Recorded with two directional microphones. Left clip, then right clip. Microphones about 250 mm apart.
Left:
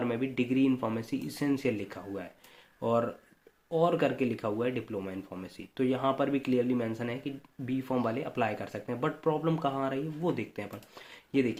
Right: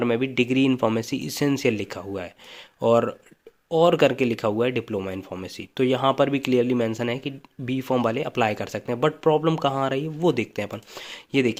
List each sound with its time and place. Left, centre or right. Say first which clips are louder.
0.0 s speech: right 9 dB; right